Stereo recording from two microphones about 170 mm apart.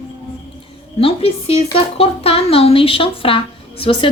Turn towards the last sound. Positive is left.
turn(degrees=30)  # may be behind; listen again after turning